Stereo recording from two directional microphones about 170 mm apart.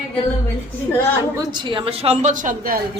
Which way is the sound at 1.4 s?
30° right (ahead or behind).